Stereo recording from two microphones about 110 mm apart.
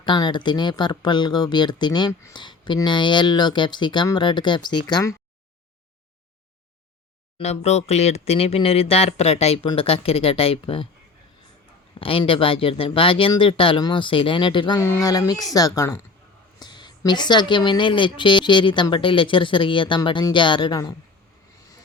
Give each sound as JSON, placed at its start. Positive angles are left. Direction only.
{"t": 0.0, "sound": "speech", "side_deg": 45}
{"t": 7.3, "sound": "speech", "side_deg": 75}
{"t": 11.9, "sound": "speech", "side_deg": 55}
{"t": 14.8, "sound": "a woman's voice", "side_deg": 25}
{"t": 16.6, "sound": "a sound", "side_deg": 40}
{"t": 17.1, "sound": "speech", "side_deg": 40}